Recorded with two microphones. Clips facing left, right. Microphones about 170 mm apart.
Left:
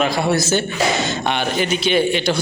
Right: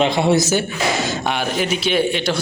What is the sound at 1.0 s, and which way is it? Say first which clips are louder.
A man's voice: left 1 dB; 5° right (ahead or behind).